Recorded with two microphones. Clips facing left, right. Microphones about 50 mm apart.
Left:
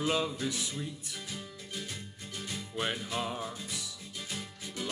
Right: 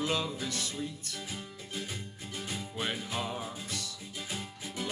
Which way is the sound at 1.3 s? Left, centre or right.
Centre.